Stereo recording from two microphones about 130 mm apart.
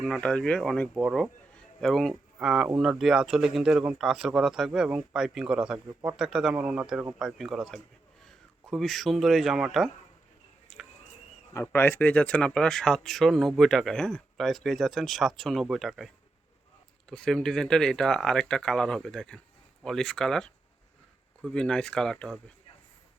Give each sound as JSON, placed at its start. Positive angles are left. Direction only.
{"t": 0.0, "sound": "a man's voice", "side_deg": 5}
{"t": 5.9, "sound": "speech", "side_deg": -25}
{"t": 6.1, "sound": "a man's voice", "side_deg": -5}
{"t": 11.5, "sound": "a man's voice", "side_deg": 15}